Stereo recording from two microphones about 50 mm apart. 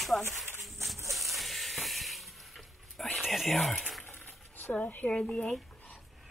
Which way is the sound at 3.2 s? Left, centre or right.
Centre.